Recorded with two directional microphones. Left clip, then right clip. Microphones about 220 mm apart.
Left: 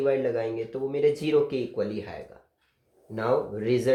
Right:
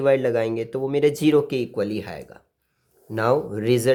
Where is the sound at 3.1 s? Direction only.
45° right (ahead or behind).